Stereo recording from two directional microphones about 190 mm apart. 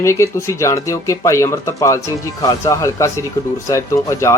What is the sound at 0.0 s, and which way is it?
Speech, 15° left (ahead or behind).